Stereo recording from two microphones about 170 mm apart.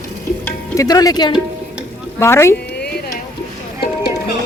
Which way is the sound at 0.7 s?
20° left (ahead or behind).